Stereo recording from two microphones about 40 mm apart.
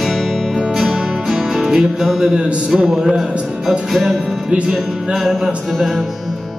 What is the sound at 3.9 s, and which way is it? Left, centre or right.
Music, centre.